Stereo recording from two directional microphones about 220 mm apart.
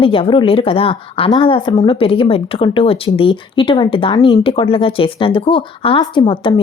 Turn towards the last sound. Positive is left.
turn(degrees=25)  # may be behind; listen again after turning